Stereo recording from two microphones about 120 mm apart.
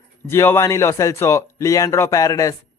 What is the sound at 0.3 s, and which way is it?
Speech, 20° left (ahead or behind).